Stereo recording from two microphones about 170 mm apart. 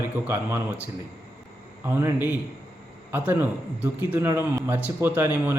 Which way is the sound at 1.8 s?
15° right (ahead or behind).